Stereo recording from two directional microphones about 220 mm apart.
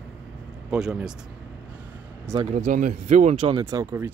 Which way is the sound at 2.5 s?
30° right (ahead or behind).